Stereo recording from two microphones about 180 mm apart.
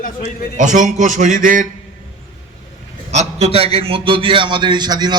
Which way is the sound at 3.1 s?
35° right (ahead or behind).